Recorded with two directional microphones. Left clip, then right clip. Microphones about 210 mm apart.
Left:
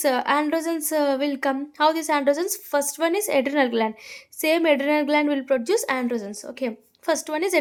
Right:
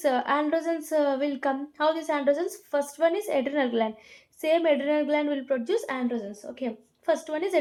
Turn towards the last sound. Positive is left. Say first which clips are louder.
# left 3 dB
turn(degrees=40)  # may be behind; listen again after turning